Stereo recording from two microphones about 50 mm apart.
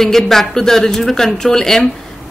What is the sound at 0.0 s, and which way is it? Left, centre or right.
A woman's voice, centre.